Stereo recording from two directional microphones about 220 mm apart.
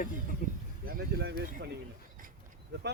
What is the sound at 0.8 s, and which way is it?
Speech, 50° right (ahead or behind).